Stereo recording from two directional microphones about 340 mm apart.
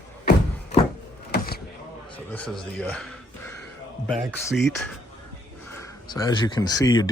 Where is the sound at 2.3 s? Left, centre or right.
Centre.